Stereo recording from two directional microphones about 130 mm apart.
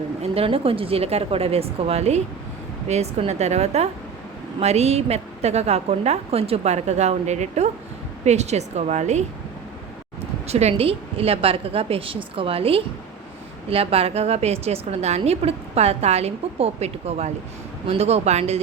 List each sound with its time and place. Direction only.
0.2 s a woman's voice: 45° right (ahead or behind)